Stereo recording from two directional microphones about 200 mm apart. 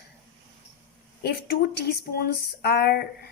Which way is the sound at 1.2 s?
50° left (ahead or behind).